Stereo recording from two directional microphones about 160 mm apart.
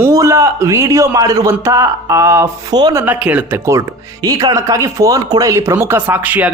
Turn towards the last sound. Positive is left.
turn(degrees=-10)  # may be behind; listen again after turning